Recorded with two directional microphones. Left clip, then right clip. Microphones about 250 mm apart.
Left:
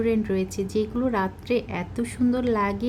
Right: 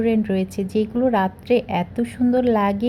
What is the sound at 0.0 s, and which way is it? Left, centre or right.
A woman's voice, centre.